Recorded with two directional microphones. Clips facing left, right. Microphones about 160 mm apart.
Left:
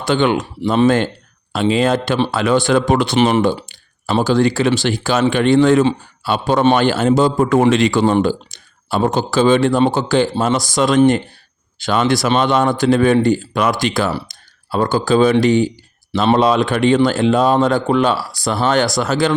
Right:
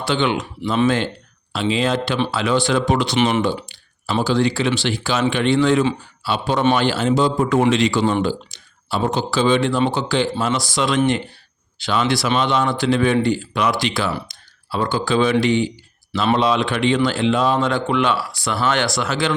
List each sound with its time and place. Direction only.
0.0 s speech: 45° left (ahead or behind)
3.2 s speech: 40° left (ahead or behind)